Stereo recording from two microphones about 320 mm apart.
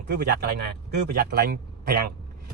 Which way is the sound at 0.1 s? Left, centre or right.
Right.